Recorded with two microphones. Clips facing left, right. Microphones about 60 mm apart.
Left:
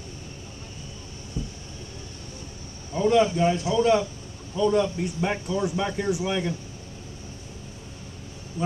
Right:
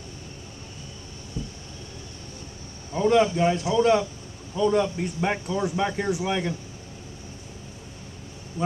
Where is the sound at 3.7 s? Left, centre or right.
Right.